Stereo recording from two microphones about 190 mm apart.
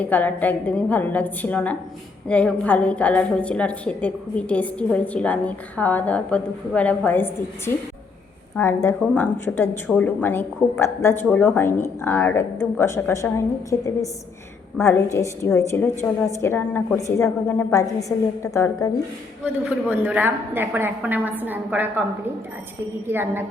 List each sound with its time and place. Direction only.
0.0 s a woman's voice: 10° left (ahead or behind)
19.6 s a woman's voice: 10° right (ahead or behind)
23.0 s a woman's voice: 10° right (ahead or behind)